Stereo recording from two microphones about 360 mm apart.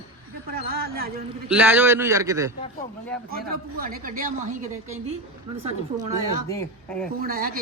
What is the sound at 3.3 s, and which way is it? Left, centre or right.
Speech, right.